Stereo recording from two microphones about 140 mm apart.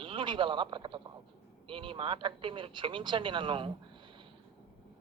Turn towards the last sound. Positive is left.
turn(degrees=-40)  # may be behind; listen again after turning